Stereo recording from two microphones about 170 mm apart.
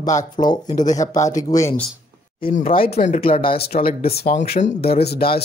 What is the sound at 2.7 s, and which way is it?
Speech, 35° left (ahead or behind).